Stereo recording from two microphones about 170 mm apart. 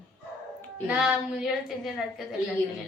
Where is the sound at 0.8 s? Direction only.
5° right (ahead or behind).